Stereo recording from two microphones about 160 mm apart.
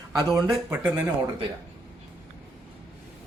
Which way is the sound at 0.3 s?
20° right (ahead or behind).